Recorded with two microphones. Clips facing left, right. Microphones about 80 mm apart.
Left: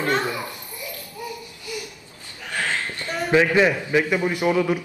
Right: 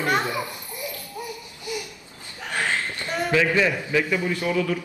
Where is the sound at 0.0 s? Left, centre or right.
Centre.